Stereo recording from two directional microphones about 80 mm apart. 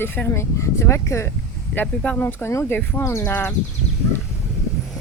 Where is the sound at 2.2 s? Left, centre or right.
Left.